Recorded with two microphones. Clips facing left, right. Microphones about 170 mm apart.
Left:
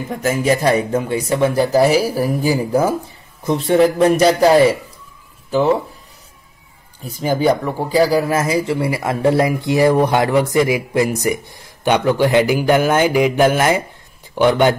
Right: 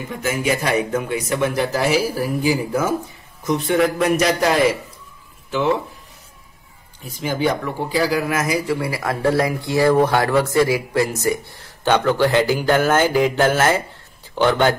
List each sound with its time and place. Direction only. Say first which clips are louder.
0.2 s speech: left 5 dB; 40° left (ahead or behind)
7.1 s speech: left 5 dB; 40° left (ahead or behind); by 14.8 s 20° left (ahead or behind)